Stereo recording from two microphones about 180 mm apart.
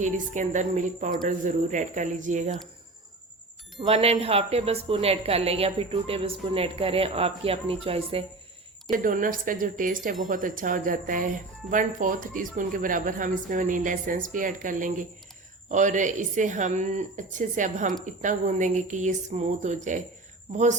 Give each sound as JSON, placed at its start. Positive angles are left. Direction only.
{"t": 0.0, "sound": "a woman's voice", "side_deg": -45}
{"t": 3.8, "sound": "speech", "side_deg": -35}
{"t": 8.9, "sound": "a woman's voice", "side_deg": -45}